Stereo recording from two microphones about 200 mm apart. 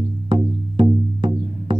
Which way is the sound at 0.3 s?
25° right (ahead or behind).